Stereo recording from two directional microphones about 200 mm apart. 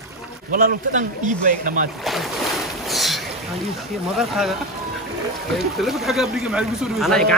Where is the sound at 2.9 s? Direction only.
Centre (ahead or behind).